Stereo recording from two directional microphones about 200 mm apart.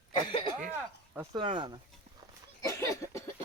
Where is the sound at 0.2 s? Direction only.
25° left (ahead or behind).